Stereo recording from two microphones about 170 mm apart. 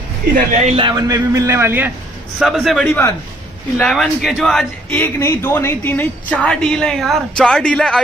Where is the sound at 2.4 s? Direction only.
Centre (ahead or behind).